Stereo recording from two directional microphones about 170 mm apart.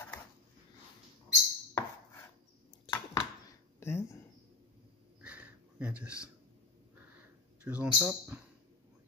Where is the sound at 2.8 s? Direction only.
25° left (ahead or behind).